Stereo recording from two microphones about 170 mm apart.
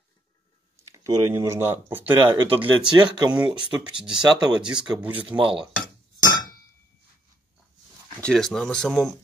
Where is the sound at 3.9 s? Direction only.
5° right (ahead or behind).